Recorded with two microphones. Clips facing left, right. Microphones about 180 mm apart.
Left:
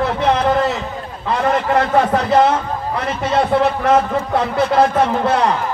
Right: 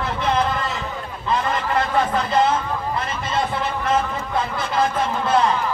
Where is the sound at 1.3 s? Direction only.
65° left (ahead or behind).